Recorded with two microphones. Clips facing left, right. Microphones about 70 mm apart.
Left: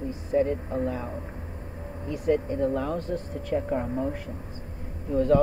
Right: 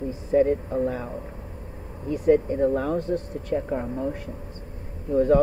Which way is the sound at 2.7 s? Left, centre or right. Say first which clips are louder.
Right 3 dB; right.